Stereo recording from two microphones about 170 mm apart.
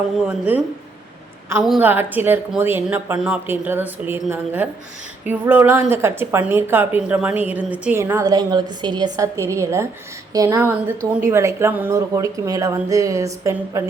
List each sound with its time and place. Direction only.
0.3 s a woman's voice: 10° right (ahead or behind)
1.6 s a woman's voice: 5° right (ahead or behind)
8.0 s a woman's voice: 20° right (ahead or behind)